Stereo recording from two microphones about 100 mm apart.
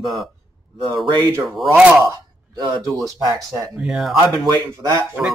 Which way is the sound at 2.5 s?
40° right (ahead or behind).